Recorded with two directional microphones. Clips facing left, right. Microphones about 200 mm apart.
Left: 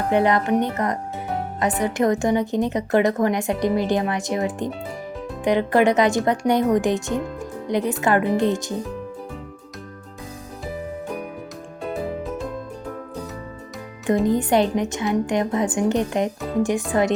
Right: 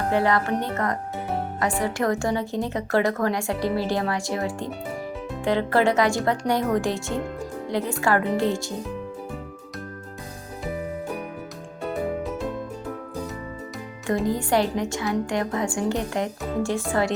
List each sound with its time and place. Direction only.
0.1 s speech: 20° left (ahead or behind)
14.3 s speech: 20° left (ahead or behind)